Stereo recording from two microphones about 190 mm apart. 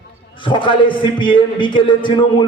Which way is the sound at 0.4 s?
25° left (ahead or behind).